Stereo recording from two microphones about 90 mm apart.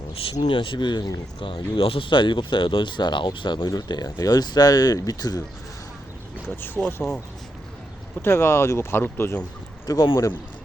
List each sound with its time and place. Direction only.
0.1 s speech: 90° left; by 5.4 s 45° left (ahead or behind)
6.7 s speech: 10° left (ahead or behind)
8.2 s speech: 25° left (ahead or behind)
9.8 s speech: 45° left (ahead or behind)